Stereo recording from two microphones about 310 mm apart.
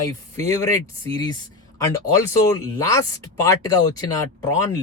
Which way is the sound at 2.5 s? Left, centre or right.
Centre.